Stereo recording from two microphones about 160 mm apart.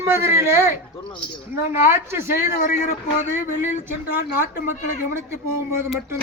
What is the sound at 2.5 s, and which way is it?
Speech, 55° left (ahead or behind).